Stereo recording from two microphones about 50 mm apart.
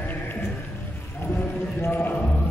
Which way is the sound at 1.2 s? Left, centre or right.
Left.